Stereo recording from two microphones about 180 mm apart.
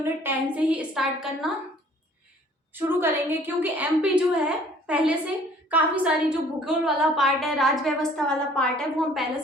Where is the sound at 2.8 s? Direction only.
10° right (ahead or behind).